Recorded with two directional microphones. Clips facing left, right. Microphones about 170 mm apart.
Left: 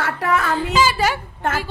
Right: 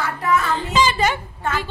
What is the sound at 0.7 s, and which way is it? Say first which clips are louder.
Speech: even; 5° left (ahead or behind).